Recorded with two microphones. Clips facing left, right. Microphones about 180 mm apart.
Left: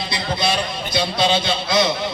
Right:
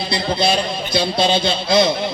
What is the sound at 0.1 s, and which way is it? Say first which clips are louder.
A man's voice: right 4 dB; 30° right (ahead or behind).